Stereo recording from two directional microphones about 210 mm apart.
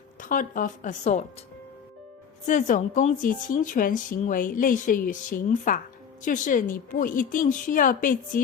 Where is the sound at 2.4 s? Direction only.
35° left (ahead or behind).